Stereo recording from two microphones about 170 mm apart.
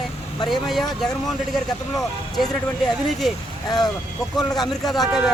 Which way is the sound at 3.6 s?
25° left (ahead or behind).